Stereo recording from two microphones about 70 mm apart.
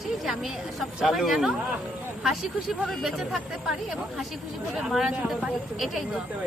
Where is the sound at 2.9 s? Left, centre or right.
Centre.